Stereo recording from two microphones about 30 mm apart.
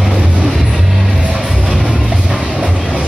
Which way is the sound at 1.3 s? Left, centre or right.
Centre.